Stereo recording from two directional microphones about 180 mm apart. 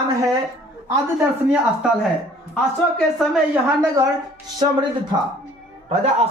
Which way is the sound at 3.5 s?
15° right (ahead or behind).